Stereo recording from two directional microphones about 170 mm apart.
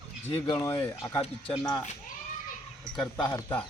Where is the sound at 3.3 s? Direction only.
15° left (ahead or behind).